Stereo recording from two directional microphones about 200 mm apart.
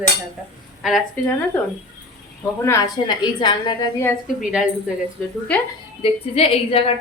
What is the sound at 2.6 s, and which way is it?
A woman's voice, 20° left (ahead or behind).